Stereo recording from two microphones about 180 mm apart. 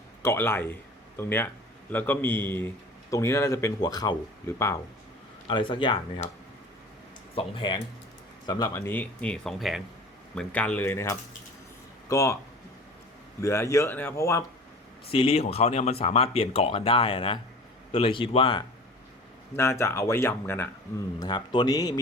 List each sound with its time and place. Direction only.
0.2 s a man's voice: 15° left (ahead or behind)
5.5 s speech: 25° left (ahead or behind)
7.3 s speech: 25° left (ahead or behind)
13.4 s speech: 15° left (ahead or behind)
15.1 s speech: 30° left (ahead or behind)
19.5 s speech: 15° left (ahead or behind)
21.2 s speech: 25° left (ahead or behind)